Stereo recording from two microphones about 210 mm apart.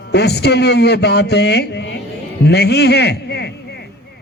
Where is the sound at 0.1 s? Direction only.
50° left (ahead or behind).